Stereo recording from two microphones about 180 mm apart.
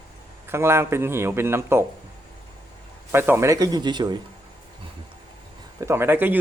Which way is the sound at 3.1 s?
15° right (ahead or behind).